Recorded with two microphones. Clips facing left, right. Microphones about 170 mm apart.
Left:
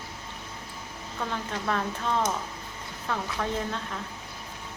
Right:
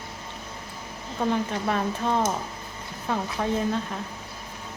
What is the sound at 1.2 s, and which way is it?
Speech, 20° right (ahead or behind).